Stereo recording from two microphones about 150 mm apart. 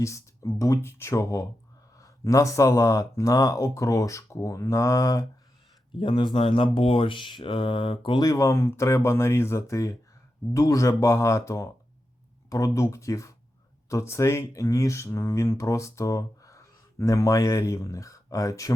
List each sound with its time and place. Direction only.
0.0 s speech: 20° left (ahead or behind)
6.0 s speech: 35° left (ahead or behind)